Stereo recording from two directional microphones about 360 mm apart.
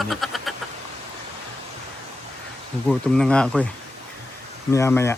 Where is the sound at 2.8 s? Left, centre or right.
Centre.